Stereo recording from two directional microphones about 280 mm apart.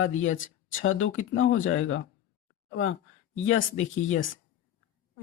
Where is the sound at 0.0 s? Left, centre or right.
Left.